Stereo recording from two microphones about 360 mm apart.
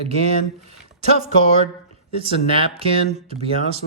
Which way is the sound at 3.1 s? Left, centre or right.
Centre.